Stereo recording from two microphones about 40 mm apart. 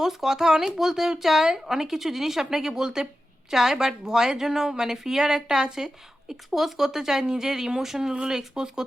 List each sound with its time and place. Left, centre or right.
0.0 s a woman's voice: centre